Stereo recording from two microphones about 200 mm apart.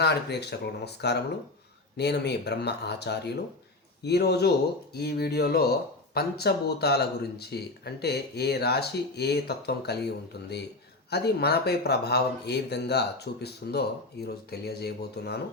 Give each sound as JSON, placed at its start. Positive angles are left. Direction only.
{"t": 0.0, "sound": "speech", "side_deg": 55}